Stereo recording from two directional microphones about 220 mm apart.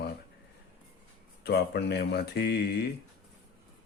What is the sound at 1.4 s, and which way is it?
Speech, 50° left (ahead or behind).